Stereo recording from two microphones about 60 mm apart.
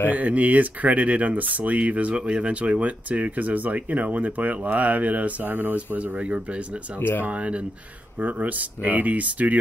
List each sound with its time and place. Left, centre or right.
0.1 s speech: right
7.0 s speech: left
7.2 s speech: right